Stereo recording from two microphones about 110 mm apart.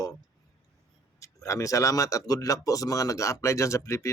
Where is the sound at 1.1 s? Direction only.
30° left (ahead or behind).